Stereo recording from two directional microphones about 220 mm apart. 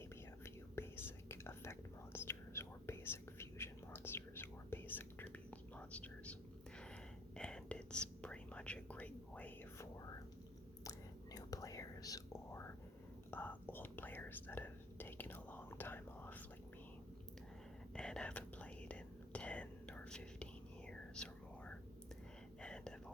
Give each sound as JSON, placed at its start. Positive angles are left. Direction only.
{"t": 0.4, "sound": "whispering", "side_deg": 10}
{"t": 7.3, "sound": "whispering", "side_deg": 5}
{"t": 17.9, "sound": "whispering", "side_deg": 5}